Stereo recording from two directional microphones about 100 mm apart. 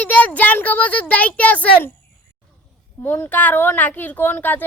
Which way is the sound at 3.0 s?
20° left (ahead or behind).